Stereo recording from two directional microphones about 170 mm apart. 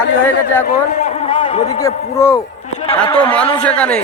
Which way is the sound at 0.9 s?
45° left (ahead or behind).